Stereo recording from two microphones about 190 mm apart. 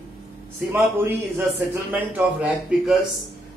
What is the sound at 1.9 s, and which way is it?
Speech, 5° right (ahead or behind).